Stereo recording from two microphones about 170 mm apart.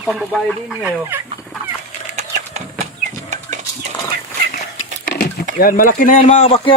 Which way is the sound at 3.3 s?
45° right (ahead or behind).